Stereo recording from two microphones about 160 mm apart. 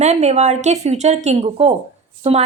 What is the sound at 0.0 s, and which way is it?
A woman's voice, 45° right (ahead or behind).